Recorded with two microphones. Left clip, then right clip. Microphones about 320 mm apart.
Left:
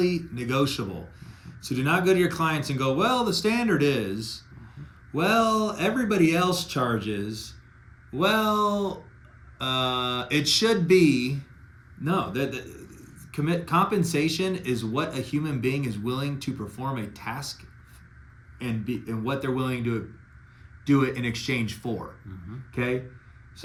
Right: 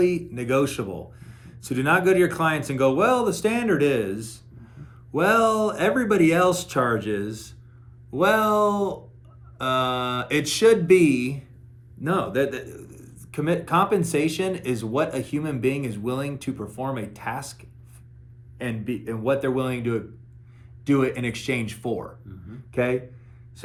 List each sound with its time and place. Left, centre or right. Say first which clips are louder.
0.0 s speech: right 4 dB; centre
4.1 s speech: even; right
4.8 s speech: right 4 dB; centre
8.3 s speech: right 4 dB; centre
12.0 s speech: right 4 dB; centre
19.2 s a man's voice: right 6 dB; centre